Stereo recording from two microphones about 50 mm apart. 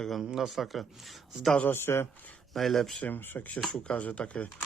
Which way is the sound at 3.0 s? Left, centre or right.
Left.